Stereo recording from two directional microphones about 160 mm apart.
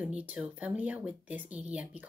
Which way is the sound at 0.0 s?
10° right (ahead or behind).